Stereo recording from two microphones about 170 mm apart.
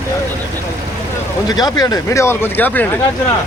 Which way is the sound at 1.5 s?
20° left (ahead or behind).